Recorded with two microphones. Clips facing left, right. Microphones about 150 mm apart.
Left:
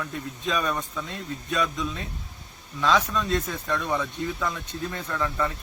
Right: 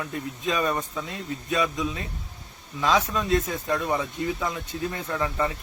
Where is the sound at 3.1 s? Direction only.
20° right (ahead or behind).